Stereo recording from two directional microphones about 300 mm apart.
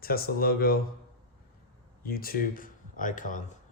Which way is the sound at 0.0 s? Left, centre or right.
Left.